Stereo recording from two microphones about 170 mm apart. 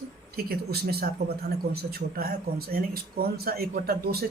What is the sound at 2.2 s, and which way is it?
Speech, 60° right (ahead or behind).